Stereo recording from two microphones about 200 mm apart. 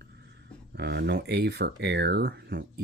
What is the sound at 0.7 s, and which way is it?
Speech, 55° right (ahead or behind).